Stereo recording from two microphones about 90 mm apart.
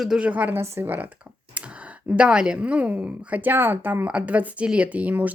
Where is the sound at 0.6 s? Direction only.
30° right (ahead or behind).